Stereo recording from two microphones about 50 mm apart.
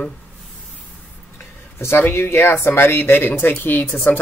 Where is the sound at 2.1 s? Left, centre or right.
Left.